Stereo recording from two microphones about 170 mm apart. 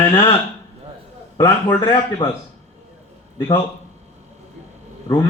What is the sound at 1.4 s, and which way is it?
Speech, 15° left (ahead or behind).